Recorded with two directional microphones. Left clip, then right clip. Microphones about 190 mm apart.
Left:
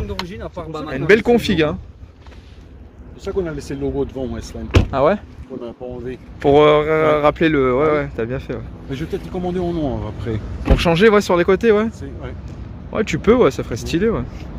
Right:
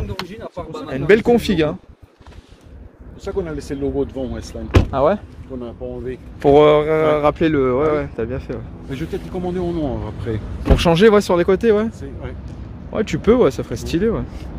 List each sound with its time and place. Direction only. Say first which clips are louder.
0.1 s speech: left 1 dB; 45° left (ahead or behind)
0.8 s speech: even; 15° right (ahead or behind)
3.3 s speech: left 1 dB; 55° left (ahead or behind)
4.9 s speech: left 1 dB; 5° left (ahead or behind)
5.6 s speech: even; 55° left (ahead or behind)
6.4 s speech: right 1 dB; 15° right (ahead or behind); by 8.6 s centre (ahead or behind)
8.9 s speech: left 1 dB; 60° left (ahead or behind)
10.7 s speech: right 1 dB; 25° right (ahead or behind); by 11.9 s centre (ahead or behind)
11.9 s speech: even; 55° left (ahead or behind)
12.4 s speech: even; 5° right (ahead or behind)